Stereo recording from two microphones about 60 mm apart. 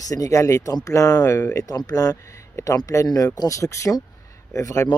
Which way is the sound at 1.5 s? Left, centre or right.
Left.